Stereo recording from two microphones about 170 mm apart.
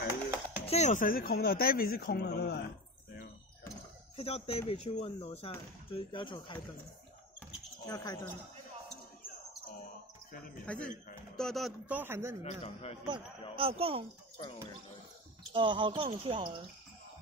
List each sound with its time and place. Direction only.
0.1 s music: 15° right (ahead or behind)
0.7 s speech: 40° left (ahead or behind); by 2.6 s 75° left (ahead or behind)
4.2 s speech: 35° left (ahead or behind)
7.8 s speech: 20° left (ahead or behind)
10.7 s speech: 5° left (ahead or behind)
11.8 s speech: 10° right (ahead or behind)
12.4 s speech: 40° left (ahead or behind)
13.6 s speech: 35° right (ahead or behind)
15.5 s speech: 30° right (ahead or behind)